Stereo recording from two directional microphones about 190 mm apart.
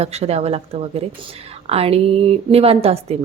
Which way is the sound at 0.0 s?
35° right (ahead or behind).